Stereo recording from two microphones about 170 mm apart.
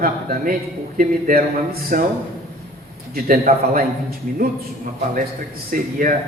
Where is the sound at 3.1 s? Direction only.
60° right (ahead or behind).